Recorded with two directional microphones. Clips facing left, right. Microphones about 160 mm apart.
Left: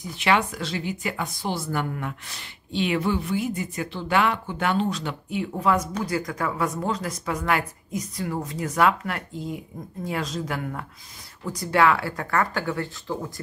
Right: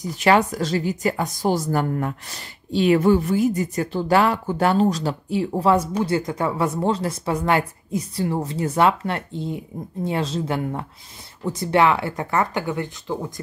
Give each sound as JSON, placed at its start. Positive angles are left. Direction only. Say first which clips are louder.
{"t": 0.0, "sound": "speech", "louder": "right 5 dB", "side_deg": -40}